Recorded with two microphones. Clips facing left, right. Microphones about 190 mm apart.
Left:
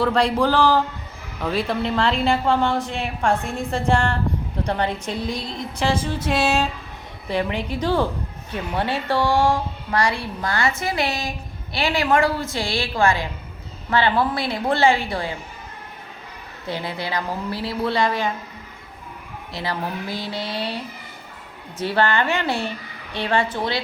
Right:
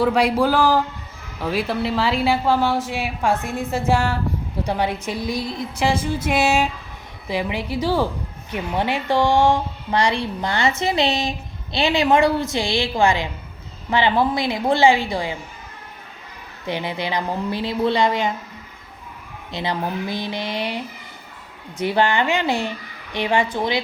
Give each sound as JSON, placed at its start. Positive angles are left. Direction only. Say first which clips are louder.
{"t": 0.0, "sound": "a woman's voice", "louder": "right 1 dB", "side_deg": -10}
{"t": 16.6, "sound": "speech", "louder": "right 3 dB", "side_deg": -20}
{"t": 19.5, "sound": "a woman's voice", "louder": "right 3 dB", "side_deg": -20}